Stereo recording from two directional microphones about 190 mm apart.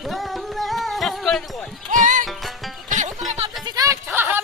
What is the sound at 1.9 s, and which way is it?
Music, 45° right (ahead or behind).